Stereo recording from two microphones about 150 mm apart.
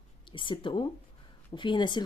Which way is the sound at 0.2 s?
35° left (ahead or behind).